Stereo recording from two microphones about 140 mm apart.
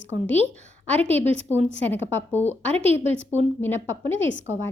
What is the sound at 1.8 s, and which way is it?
Speech, 15° left (ahead or behind).